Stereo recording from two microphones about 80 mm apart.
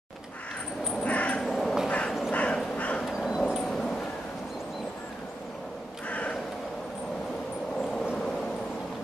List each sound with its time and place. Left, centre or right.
1.0 s crow: centre
1.5 s cat: centre
1.9 s a sound: centre
2.3 s crow: centre
3.1 s dog: centre
3.6 s dog: centre
6.0 s a sound: centre